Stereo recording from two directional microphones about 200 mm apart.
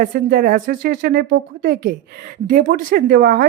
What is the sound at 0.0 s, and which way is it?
Speech, 45° right (ahead or behind).